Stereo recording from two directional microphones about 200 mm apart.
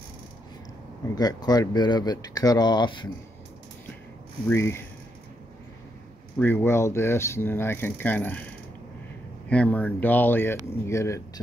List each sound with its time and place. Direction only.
1.1 s speech: 20° left (ahead or behind)
4.5 s speech: 10° left (ahead or behind)
6.4 s speech: 10° left (ahead or behind)
9.5 s speech: 5° left (ahead or behind)